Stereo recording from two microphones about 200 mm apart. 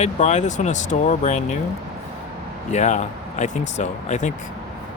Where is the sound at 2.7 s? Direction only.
35° left (ahead or behind).